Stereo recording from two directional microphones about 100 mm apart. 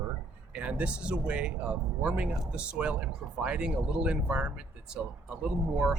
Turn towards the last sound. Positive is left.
turn(degrees=-10)  # may be behind; listen again after turning